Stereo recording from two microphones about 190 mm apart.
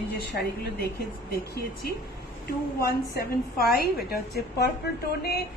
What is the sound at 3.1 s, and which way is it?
A woman's voice, 55° left (ahead or behind).